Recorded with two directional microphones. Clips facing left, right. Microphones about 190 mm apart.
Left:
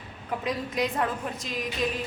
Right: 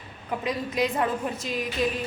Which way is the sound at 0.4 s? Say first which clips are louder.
Right 2 dB; centre (ahead or behind).